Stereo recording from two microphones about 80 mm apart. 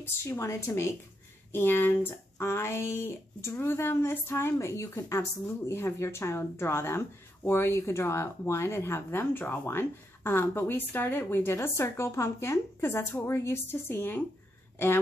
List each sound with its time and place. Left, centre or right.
0.0 s a woman's voice: left